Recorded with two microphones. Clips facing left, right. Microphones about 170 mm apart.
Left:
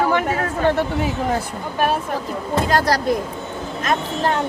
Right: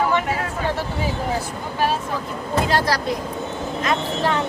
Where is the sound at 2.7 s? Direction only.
45° left (ahead or behind).